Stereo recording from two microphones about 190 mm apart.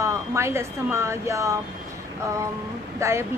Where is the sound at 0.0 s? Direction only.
15° right (ahead or behind).